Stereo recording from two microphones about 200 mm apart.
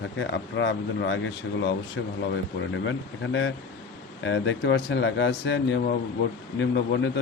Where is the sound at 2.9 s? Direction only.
70° left (ahead or behind).